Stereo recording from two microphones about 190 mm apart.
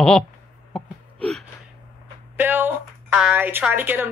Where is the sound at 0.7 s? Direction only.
5° left (ahead or behind).